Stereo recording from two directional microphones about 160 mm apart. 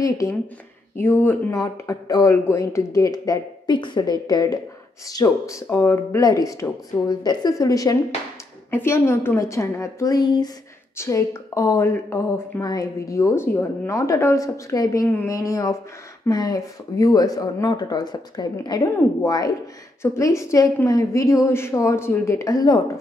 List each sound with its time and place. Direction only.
1.0 s a woman's voice: 15° left (ahead or behind)